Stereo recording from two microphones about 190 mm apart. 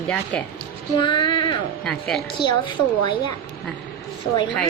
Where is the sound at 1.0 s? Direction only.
25° left (ahead or behind).